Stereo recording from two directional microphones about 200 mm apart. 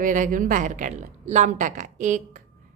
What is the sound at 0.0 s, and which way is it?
A woman's voice, 40° right (ahead or behind).